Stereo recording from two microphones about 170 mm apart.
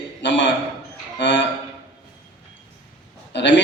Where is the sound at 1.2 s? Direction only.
90° left.